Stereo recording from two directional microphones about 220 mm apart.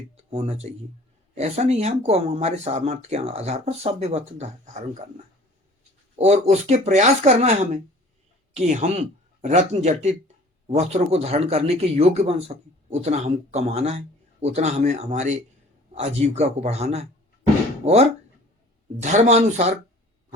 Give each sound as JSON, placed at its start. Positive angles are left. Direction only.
{"t": 0.2, "sound": "speech", "side_deg": -30}
{"t": 6.1, "sound": "speech", "side_deg": -30}
{"t": 19.1, "sound": "speech", "side_deg": -30}